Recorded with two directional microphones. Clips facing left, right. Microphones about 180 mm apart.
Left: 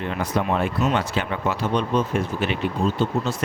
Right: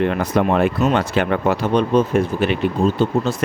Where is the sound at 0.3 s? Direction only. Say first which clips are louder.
Right 6 dB; 70° right (ahead or behind).